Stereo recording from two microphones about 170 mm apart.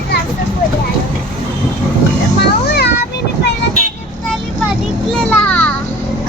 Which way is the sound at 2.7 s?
70° left (ahead or behind).